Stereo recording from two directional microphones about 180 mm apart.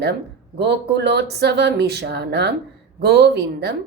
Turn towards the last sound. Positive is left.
turn(degrees=-65)  # may be behind; listen again after turning